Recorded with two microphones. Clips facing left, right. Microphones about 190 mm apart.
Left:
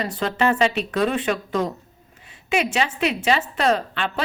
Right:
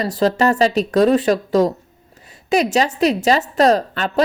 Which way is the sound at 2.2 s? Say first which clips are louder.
Right 6 dB; 40° right (ahead or behind).